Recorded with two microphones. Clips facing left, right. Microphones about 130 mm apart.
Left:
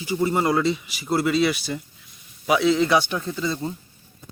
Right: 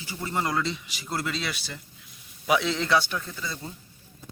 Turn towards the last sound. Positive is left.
turn(degrees=25)  # may be behind; listen again after turning